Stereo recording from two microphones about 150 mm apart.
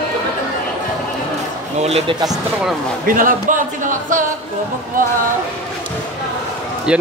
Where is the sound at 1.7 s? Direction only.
45° right (ahead or behind).